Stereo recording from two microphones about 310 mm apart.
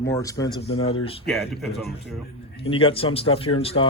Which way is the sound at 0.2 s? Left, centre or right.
Centre.